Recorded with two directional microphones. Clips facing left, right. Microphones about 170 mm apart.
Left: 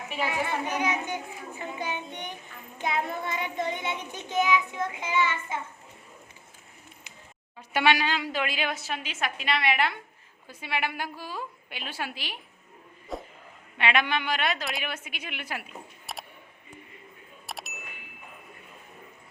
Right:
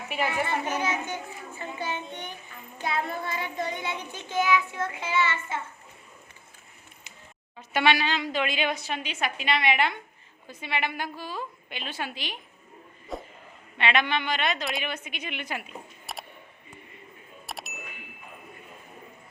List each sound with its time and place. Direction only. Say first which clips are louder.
0.4 s a child's voice: even; 15° left (ahead or behind)
7.7 s a woman's voice: even; 10° left (ahead or behind)
13.1 s a sound: even; centre (ahead or behind)
13.7 s a child's voice: even; 10° left (ahead or behind)
16.1 s a sound: right 1 dB; centre (ahead or behind)
17.4 s ding: right 1 dB; centre (ahead or behind)